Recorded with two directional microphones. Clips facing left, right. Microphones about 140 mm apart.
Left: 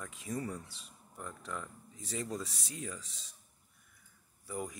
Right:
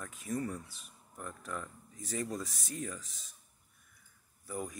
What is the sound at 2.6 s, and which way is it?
Speech, 30° left (ahead or behind).